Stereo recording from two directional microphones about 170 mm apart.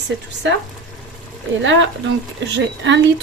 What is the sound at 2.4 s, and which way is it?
Speech, 90° right.